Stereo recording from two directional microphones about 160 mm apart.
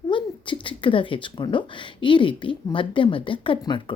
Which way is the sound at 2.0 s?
30° left (ahead or behind).